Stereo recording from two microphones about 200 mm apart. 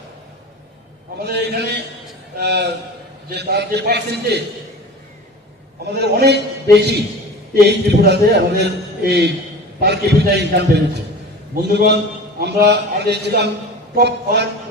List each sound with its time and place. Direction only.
1.2 s a man's voice: 55° right (ahead or behind)
2.4 s a sound: 60° right (ahead or behind)
3.2 s a man's voice: 55° right (ahead or behind)
6.0 s a man's voice: 55° right (ahead or behind)
7.5 s a man's voice: 55° right (ahead or behind)